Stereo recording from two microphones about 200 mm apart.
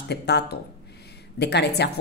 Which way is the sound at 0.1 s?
55° left (ahead or behind).